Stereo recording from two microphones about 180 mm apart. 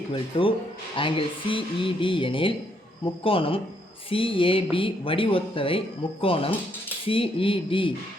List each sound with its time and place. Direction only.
0.1 s a man's voice: 30° left (ahead or behind)